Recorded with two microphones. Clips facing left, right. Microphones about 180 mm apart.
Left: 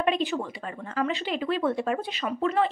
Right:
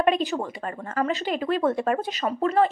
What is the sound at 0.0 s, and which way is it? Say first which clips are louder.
A woman's voice: right 3 dB; 45° right (ahead or behind).